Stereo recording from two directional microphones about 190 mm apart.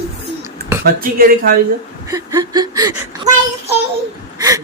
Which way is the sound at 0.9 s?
50° right (ahead or behind).